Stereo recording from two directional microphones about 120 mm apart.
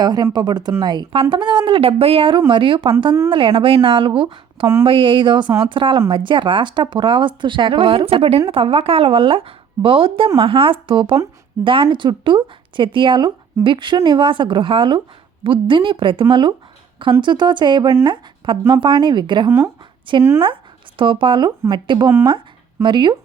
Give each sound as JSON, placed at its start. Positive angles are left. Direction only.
{"t": 0.0, "sound": "a woman's voice", "side_deg": -35}
{"t": 1.1, "sound": "speech", "side_deg": -50}
{"t": 4.6, "sound": "speech", "side_deg": -30}
{"t": 4.9, "sound": "a woman's voice", "side_deg": -45}
{"t": 19.5, "sound": "speech", "side_deg": -20}
{"t": 20.1, "sound": "a woman's voice", "side_deg": -45}